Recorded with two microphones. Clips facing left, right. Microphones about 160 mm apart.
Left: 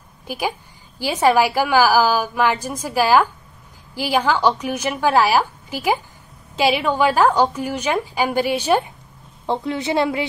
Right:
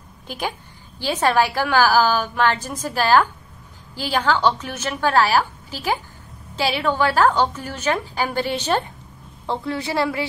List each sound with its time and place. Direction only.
0.3 s a woman's voice: 10° left (ahead or behind)